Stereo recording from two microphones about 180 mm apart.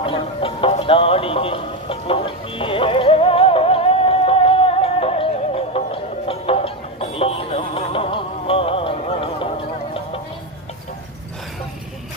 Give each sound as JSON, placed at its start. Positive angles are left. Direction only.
{"t": 0.0, "sound": "music", "side_deg": 30}